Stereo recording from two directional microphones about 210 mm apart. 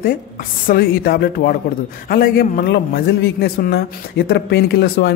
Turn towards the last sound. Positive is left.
turn(degrees=50)  # may be behind; listen again after turning